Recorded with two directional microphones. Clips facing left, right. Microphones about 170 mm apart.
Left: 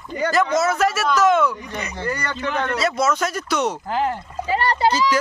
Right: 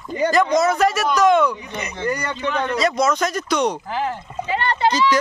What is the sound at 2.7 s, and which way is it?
Speech, 5° left (ahead or behind).